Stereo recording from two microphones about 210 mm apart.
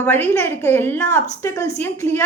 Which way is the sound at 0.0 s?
10° left (ahead or behind).